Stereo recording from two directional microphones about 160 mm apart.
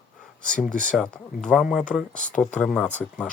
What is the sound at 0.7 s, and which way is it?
Speech, 55° left (ahead or behind).